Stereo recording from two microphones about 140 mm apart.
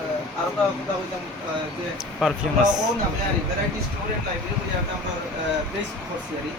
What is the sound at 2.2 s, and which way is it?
Speech, centre (ahead or behind).